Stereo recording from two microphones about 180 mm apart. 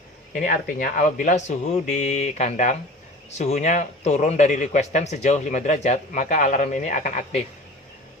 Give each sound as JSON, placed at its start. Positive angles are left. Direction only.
{"t": 0.3, "sound": "a man's voice", "side_deg": 45}